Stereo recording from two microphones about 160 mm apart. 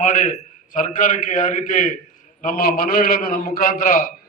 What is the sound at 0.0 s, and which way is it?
A man's voice, 55° left (ahead or behind).